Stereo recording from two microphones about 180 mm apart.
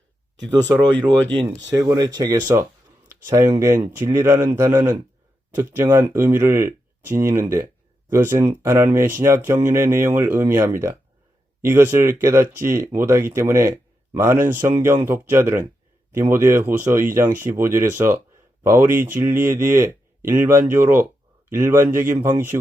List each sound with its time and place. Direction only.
0.7 s speech: 25° right (ahead or behind)